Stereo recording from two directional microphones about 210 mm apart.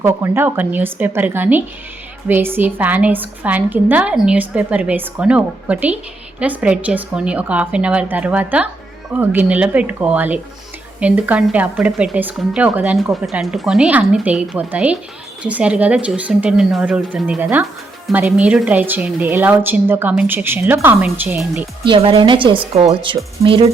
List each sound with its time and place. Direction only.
0.0 s speech: 10° right (ahead or behind)
21.8 s speech: 25° right (ahead or behind)